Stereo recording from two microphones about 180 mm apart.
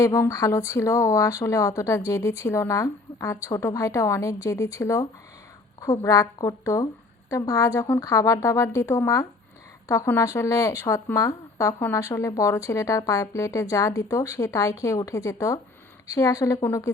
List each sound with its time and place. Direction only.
0.0 s a woman's voice: 15° left (ahead or behind)